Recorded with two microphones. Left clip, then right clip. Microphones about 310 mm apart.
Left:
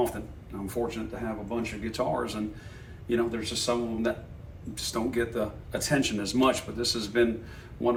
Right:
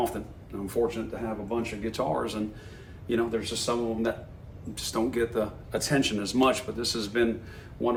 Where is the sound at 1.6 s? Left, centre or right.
Centre.